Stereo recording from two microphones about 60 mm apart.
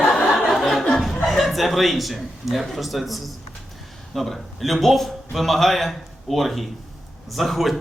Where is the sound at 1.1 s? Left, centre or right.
Centre.